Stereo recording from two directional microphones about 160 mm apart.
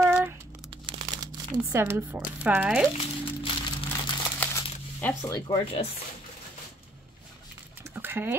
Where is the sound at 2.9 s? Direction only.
35° left (ahead or behind).